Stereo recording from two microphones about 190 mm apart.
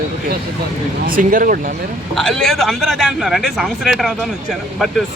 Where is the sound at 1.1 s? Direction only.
45° right (ahead or behind).